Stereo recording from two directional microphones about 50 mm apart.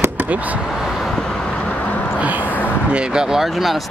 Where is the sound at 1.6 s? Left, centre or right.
Left.